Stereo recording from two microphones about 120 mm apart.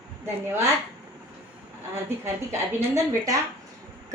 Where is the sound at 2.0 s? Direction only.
20° right (ahead or behind).